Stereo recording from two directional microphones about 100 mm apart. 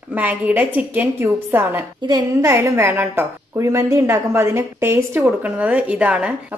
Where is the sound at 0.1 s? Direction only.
15° right (ahead or behind).